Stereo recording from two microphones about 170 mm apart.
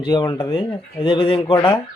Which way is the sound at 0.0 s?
25° left (ahead or behind).